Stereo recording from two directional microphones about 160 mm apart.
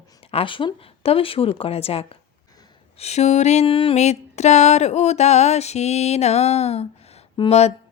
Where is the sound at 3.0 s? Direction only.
45° left (ahead or behind).